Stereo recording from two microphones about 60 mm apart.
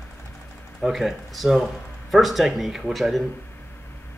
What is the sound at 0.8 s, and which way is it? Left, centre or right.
Speech, centre.